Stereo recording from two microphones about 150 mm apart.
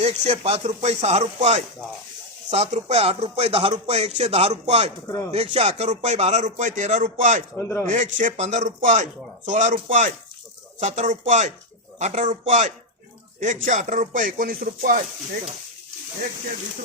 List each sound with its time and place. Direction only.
0.0 s speech: 45° right (ahead or behind)
5.0 s speech: 20° left (ahead or behind)
5.3 s speech: 45° right (ahead or behind)
7.5 s speech: 15° left (ahead or behind)
7.9 s speech: 55° right (ahead or behind)
10.8 s speech: 50° right (ahead or behind)
13.7 s a sound: 55° right (ahead or behind)